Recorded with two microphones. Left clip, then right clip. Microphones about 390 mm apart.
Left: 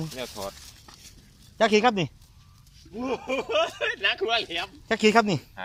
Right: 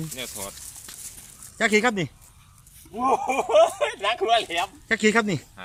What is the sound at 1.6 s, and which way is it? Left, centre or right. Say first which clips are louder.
Speech: even; centre.